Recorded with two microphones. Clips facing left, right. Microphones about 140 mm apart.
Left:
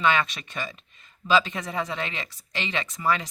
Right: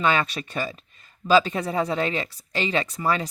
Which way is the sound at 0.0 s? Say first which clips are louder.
Right 1 dB; 40° right (ahead or behind).